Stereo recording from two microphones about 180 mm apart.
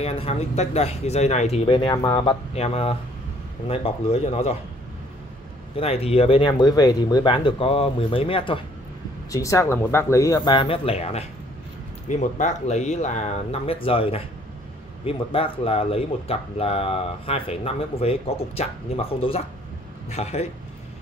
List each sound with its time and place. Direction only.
0.0 s speech: 35° left (ahead or behind)
2.5 s speech: 35° left (ahead or behind)
5.8 s speech: 35° left (ahead or behind)
9.3 s speech: 15° left (ahead or behind); by 20.4 s 35° left (ahead or behind)